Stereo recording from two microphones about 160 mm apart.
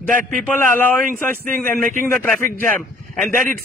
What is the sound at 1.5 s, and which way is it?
Speech, 60° right (ahead or behind).